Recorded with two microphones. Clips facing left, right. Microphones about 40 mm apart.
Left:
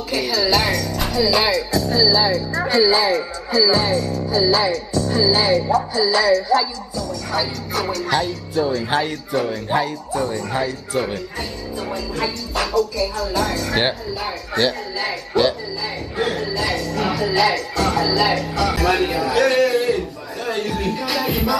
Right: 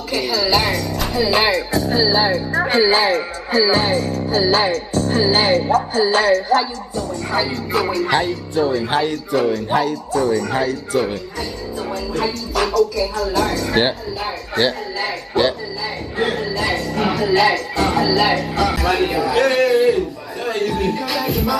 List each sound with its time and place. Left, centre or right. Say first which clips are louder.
0.1 s music: right 1 dB; centre
1.2 s speech: right 1 dB; right
1.7 s speech: even; right
3.5 s music: right 1 dB; right
8.2 s speech: right 2 dB; centre
10.2 s speech: right 8 dB; right
10.5 s a man's voice: right 3 dB; centre
12.2 s a man's voice: right 4 dB; centre
16.2 s music: right 2 dB; centre
18.7 s a man's voice: even; centre
19.7 s a sound: right 4 dB; centre
20.6 s music: right 3 dB; centre